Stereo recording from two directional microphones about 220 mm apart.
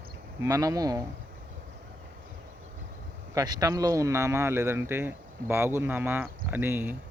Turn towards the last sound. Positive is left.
turn(degrees=-10)  # may be behind; listen again after turning